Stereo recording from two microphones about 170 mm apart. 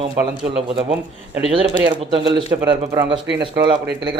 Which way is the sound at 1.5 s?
30° right (ahead or behind).